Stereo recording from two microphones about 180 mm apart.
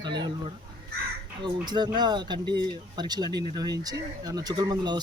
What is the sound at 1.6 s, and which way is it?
Speech, 25° right (ahead or behind).